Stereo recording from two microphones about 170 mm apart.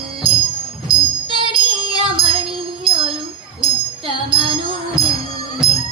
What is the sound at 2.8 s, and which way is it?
Jingle bell, 30° right (ahead or behind).